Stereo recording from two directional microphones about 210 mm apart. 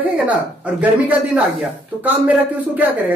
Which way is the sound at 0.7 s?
5° right (ahead or behind).